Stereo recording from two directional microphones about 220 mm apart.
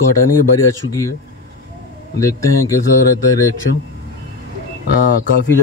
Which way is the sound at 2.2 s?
15° left (ahead or behind).